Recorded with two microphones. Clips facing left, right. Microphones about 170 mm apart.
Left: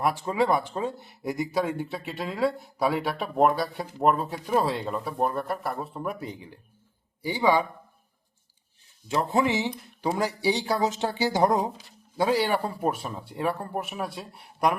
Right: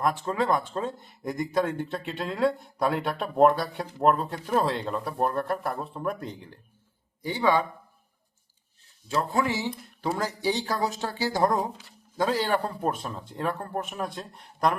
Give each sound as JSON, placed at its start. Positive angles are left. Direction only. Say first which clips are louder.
{"t": 0.0, "sound": "speech", "louder": "left 1 dB", "side_deg": 10}
{"t": 9.0, "sound": "speech", "louder": "left 2 dB", "side_deg": 20}